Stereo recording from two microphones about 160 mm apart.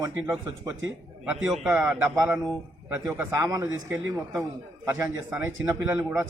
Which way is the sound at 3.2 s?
20° right (ahead or behind).